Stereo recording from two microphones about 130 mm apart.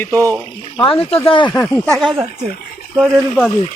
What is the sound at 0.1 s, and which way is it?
Speech, 25° right (ahead or behind).